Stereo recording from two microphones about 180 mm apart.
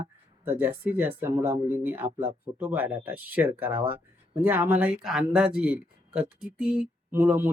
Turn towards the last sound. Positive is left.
turn(degrees=-10)  # may be behind; listen again after turning